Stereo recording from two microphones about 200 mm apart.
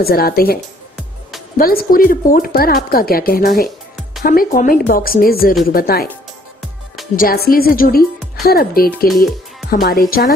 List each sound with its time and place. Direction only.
0.0 s speech: 50° left (ahead or behind)
1.6 s speech: 45° left (ahead or behind)
7.2 s speech: 45° left (ahead or behind)